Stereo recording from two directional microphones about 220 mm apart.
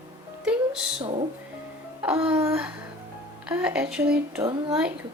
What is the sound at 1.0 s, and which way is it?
Music, 25° right (ahead or behind).